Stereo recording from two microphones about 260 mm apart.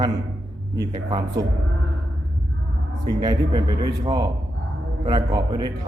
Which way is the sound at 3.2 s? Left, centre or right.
Centre.